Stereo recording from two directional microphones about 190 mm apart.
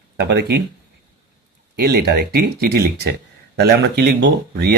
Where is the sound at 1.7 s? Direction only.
55° right (ahead or behind).